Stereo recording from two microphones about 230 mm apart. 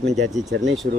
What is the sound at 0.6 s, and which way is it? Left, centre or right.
Speech, centre.